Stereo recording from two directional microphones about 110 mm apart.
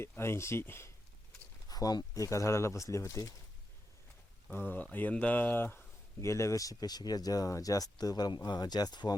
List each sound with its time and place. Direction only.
0.0 s speech: 25° left (ahead or behind)
1.6 s speech: 35° left (ahead or behind)
4.5 s speech: 20° left (ahead or behind); by 9.1 s 40° left (ahead or behind)